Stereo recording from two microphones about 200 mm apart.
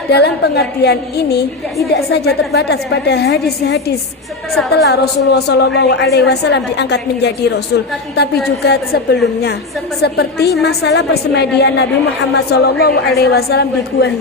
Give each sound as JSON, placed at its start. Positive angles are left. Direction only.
{"t": 0.1, "sound": "a woman's voice", "side_deg": 55}